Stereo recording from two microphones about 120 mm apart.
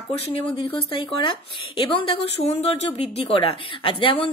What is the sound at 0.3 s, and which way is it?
A woman's voice, 50° left (ahead or behind).